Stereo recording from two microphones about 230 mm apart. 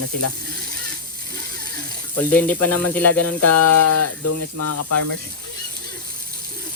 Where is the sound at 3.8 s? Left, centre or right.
Left.